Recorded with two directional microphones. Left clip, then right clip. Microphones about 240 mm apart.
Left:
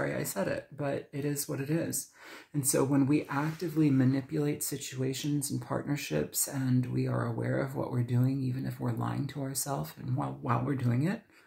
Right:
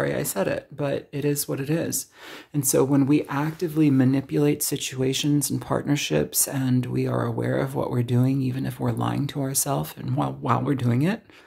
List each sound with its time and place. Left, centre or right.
0.0 s speech: right